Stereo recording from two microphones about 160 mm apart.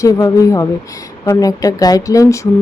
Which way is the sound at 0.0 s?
20° left (ahead or behind).